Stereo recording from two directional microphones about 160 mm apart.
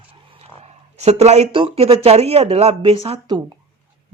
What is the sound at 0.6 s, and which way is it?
A woman's voice, 40° right (ahead or behind).